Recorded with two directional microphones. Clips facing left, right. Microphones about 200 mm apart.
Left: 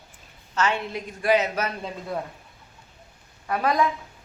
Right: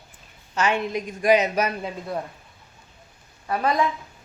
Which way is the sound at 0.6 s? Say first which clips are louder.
Right 2 dB; 15° right (ahead or behind).